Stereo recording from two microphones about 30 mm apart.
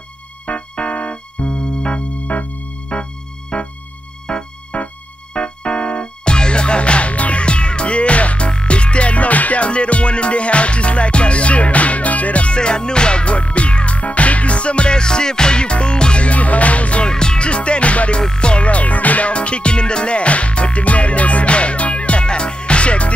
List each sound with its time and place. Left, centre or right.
0.5 s music: left
2.0 s music: left
2.9 s music: left
4.3 s music: left
4.7 s music: left
5.3 s music: left
9.6 s music: left
12.4 s music: left
16.3 s music: left
17.0 s music: left
17.5 s music: left
18.3 s music: left
19.3 s music: left